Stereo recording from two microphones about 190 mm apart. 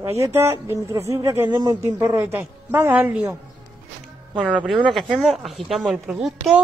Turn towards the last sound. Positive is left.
turn(degrees=0)  # may be behind; listen again after turning